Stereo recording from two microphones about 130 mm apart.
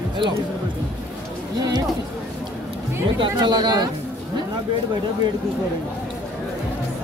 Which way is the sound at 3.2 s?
35° right (ahead or behind).